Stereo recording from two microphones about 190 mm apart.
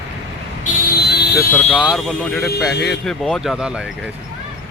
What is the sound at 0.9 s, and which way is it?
Vehicle, 60° left (ahead or behind).